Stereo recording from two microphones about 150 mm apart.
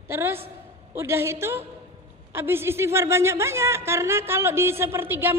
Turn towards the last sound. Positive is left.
turn(degrees=-15)  # may be behind; listen again after turning